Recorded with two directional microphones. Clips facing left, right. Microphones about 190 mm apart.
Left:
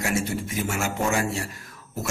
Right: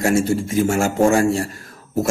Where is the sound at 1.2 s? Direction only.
35° right (ahead or behind).